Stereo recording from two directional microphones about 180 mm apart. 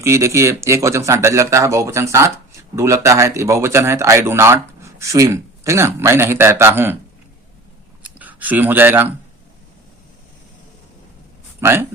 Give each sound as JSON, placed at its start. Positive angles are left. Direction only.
{"t": 0.0, "sound": "speech", "side_deg": -15}
{"t": 8.2, "sound": "speech", "side_deg": -10}
{"t": 11.6, "sound": "speech", "side_deg": -15}